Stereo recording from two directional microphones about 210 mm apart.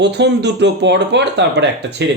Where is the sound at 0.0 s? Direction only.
55° right (ahead or behind).